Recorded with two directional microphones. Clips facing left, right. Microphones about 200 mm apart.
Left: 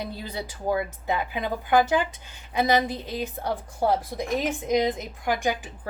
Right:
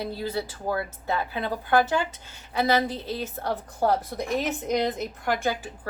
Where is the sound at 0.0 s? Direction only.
20° left (ahead or behind).